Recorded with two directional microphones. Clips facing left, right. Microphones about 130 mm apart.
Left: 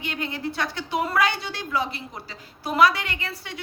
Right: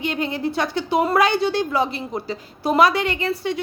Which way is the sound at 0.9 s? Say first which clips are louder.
Right 6 dB; 30° right (ahead or behind).